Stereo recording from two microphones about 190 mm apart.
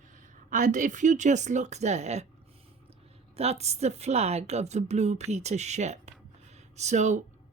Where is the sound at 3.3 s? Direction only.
35° right (ahead or behind).